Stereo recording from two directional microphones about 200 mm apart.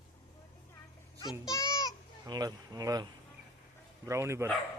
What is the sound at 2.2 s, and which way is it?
Speech, 20° right (ahead or behind).